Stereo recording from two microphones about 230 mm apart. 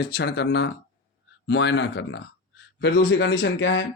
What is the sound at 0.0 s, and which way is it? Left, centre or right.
Speech, left.